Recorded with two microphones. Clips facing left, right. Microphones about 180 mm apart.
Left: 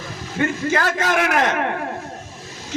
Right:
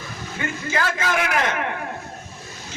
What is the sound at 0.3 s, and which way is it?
A man's voice, 45° left (ahead or behind).